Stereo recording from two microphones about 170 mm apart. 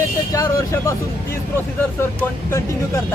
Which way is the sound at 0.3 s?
15° left (ahead or behind).